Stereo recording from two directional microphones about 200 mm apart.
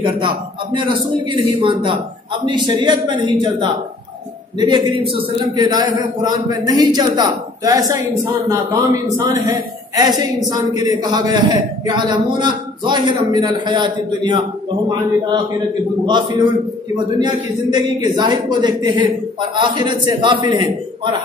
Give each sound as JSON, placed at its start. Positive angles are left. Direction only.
{"t": 0.0, "sound": "a woman's voice", "side_deg": -25}
{"t": 16.1, "sound": "a woman's voice", "side_deg": -20}